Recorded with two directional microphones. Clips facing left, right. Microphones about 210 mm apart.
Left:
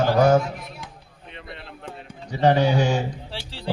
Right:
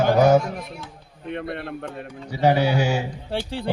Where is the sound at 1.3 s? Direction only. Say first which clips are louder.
Right 11 dB; 55° right (ahead or behind).